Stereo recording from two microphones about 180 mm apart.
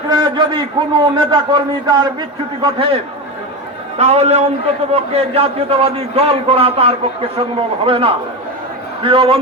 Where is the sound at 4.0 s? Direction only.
35° right (ahead or behind).